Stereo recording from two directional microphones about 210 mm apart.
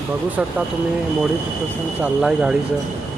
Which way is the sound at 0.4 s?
5° right (ahead or behind).